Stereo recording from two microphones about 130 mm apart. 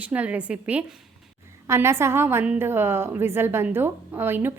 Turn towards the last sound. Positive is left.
turn(degrees=-15)  # may be behind; listen again after turning